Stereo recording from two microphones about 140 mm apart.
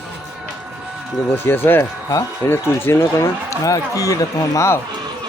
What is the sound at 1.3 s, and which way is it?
Speech, 15° left (ahead or behind).